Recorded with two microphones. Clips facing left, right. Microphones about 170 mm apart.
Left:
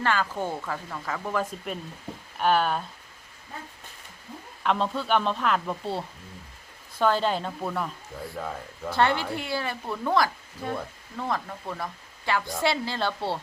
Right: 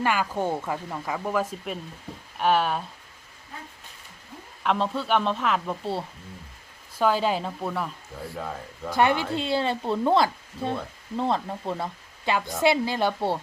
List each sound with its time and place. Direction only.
0.0 s speech: 10° right (ahead or behind)
4.6 s speech: centre (ahead or behind)
8.9 s speech: 15° right (ahead or behind)